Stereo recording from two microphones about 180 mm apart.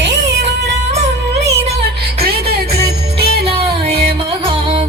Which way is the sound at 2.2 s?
60° right (ahead or behind).